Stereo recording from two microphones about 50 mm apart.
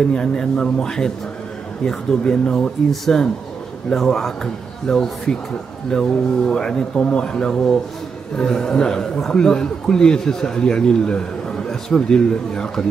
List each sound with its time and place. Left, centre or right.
0.1 s a man's voice: centre